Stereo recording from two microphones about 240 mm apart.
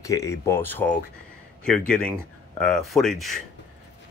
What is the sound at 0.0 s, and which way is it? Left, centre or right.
Speech, centre.